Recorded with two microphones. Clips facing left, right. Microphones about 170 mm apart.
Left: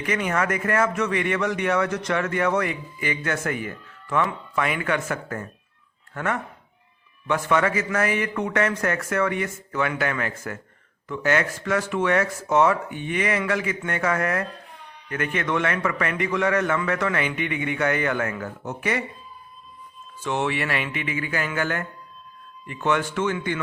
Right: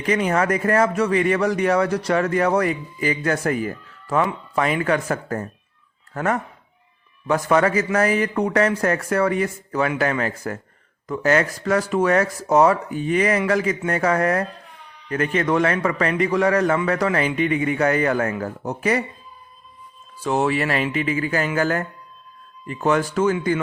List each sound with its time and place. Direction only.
0.0 s speech: 30° right (ahead or behind)
20.2 s speech: 35° right (ahead or behind)